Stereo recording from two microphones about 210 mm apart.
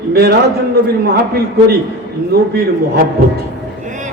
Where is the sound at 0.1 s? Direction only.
50° right (ahead or behind).